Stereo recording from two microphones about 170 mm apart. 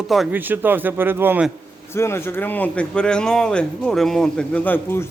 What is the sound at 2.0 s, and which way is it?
A man's voice, 15° left (ahead or behind).